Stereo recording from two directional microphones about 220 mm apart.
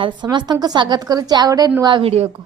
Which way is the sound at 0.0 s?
20° right (ahead or behind).